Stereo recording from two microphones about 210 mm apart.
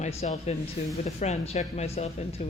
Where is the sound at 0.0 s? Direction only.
30° left (ahead or behind).